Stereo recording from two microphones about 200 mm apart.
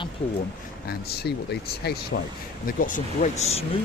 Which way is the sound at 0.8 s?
50° left (ahead or behind).